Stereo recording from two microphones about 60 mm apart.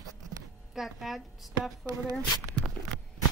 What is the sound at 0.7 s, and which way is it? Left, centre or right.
A woman's voice, centre.